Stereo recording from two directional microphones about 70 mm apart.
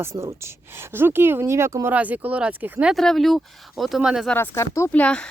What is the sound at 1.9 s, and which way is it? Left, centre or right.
Speech, right.